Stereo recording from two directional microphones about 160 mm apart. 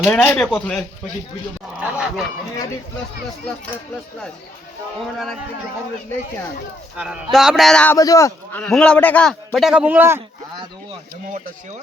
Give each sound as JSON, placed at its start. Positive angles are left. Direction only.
{"t": 0.0, "sound": "a man's voice", "side_deg": 10}
{"t": 1.8, "sound": "a sound", "side_deg": -5}
{"t": 6.9, "sound": "a man's voice", "side_deg": -5}
{"t": 7.9, "sound": "a man's voice", "side_deg": 20}
{"t": 8.5, "sound": "a man's voice", "side_deg": 5}